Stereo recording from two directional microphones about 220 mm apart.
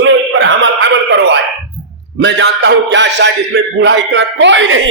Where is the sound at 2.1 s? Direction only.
55° right (ahead or behind).